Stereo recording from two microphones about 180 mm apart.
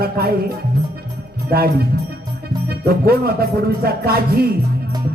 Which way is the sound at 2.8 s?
60° right (ahead or behind).